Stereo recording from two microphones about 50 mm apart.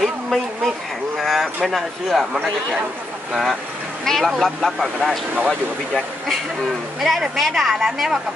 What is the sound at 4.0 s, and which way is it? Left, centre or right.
Speech, centre.